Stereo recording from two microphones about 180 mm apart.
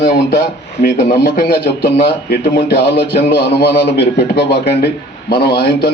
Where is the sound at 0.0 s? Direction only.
65° left (ahead or behind).